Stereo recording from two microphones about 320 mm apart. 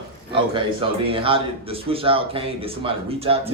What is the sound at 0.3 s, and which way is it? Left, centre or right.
A man's voice, centre.